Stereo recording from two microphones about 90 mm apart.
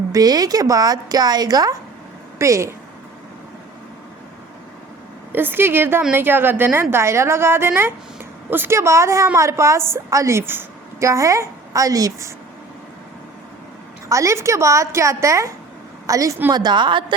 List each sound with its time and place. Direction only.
0.1 s a woman's voice: 45° right (ahead or behind)
2.4 s a woman's voice: 35° right (ahead or behind)
5.3 s a woman's voice: 20° right (ahead or behind)
11.1 s a woman's voice: 35° right (ahead or behind)
14.1 s a woman's voice: 35° right (ahead or behind)
16.5 s a woman's voice: 50° right (ahead or behind)